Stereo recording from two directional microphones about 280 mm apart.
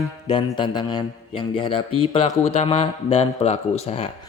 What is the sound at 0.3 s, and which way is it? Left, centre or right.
A man's voice, centre.